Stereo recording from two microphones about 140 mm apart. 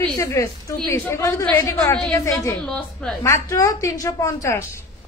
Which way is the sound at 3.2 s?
25° left (ahead or behind).